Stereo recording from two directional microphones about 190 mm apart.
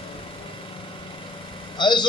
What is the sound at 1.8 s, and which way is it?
Speech, 25° left (ahead or behind).